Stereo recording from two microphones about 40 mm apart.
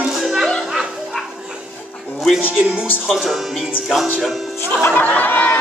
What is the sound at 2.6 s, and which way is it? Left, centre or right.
Speech, right.